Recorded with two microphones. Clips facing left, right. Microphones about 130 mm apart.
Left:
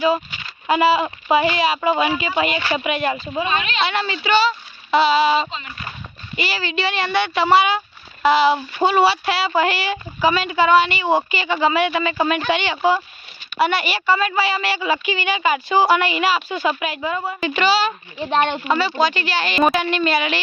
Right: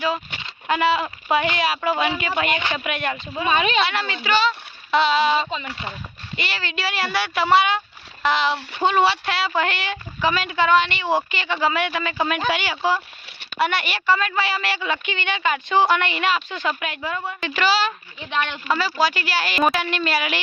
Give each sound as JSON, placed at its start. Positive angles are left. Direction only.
{"t": 0.7, "sound": "a woman's voice", "side_deg": 5}
{"t": 18.3, "sound": "speech", "side_deg": 40}
{"t": 18.6, "sound": "a woman's voice", "side_deg": 0}